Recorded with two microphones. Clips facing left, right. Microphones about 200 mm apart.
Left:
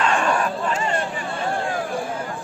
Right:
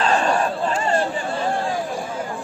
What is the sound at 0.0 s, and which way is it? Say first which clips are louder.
Crowd: right 2 dB; 35° right (ahead or behind).